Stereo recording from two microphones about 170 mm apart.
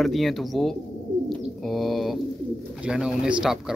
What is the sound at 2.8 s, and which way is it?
Speech, 5° right (ahead or behind).